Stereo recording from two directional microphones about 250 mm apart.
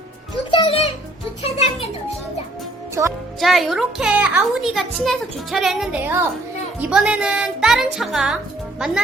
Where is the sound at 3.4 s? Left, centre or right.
Centre.